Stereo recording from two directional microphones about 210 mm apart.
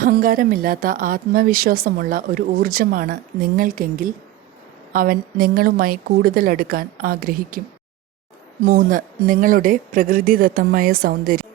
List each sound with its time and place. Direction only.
0.0 s speech: 40° right (ahead or behind)
8.6 s speech: 45° right (ahead or behind)